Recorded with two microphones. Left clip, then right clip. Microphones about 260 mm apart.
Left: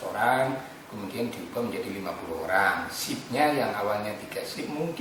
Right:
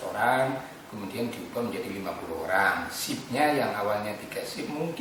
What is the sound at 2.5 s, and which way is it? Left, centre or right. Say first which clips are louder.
Speech: left 1 dB; centre.